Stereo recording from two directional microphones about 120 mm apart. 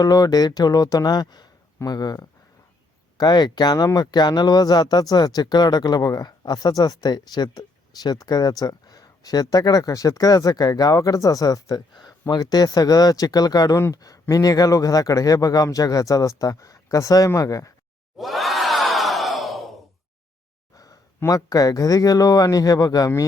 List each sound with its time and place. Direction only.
0.0 s speech: 30° left (ahead or behind)
18.2 s crowd: centre (ahead or behind)
20.7 s speech: 30° left (ahead or behind)